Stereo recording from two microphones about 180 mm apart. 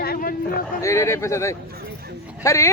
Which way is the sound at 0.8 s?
15° left (ahead or behind).